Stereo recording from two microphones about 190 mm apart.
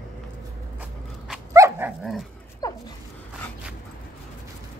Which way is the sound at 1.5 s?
15° right (ahead or behind).